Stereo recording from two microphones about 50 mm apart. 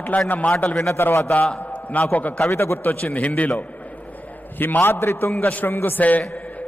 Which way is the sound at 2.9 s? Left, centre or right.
Left.